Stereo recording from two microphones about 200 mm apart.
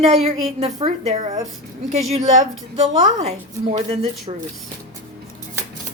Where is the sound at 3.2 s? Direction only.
30° right (ahead or behind).